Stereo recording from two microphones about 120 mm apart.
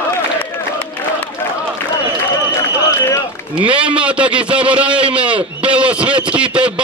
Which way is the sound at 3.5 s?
10° right (ahead or behind).